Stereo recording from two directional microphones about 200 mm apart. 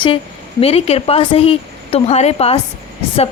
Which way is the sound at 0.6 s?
30° left (ahead or behind).